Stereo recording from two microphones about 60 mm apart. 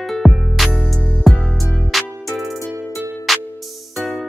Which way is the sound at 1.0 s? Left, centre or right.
Centre.